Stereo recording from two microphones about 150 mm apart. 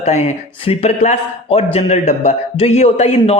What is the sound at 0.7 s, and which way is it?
A man's voice, 45° left (ahead or behind).